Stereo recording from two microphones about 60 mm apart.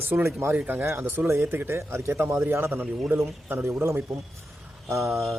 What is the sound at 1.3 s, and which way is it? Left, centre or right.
Speech, right.